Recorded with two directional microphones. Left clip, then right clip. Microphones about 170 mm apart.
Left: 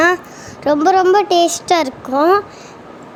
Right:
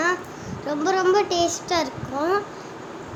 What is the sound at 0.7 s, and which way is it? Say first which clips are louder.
A woman's voice: left 9 dB; 50° left (ahead or behind).